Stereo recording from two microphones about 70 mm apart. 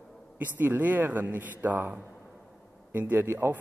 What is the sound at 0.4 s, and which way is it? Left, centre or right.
A man's voice, right.